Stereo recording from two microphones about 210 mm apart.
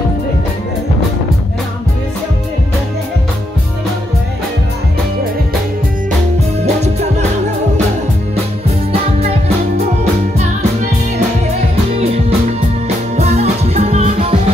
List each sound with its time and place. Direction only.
6.6 s music: 30° right (ahead or behind)
12.0 s music: 30° right (ahead or behind)